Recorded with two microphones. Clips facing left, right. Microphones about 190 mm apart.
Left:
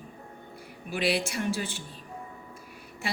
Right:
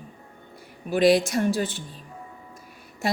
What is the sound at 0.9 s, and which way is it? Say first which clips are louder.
Speech: right 9 dB; 40° right (ahead or behind).